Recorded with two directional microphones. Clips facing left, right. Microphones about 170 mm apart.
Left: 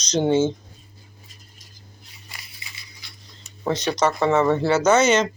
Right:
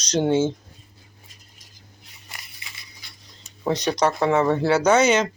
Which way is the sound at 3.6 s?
15° right (ahead or behind).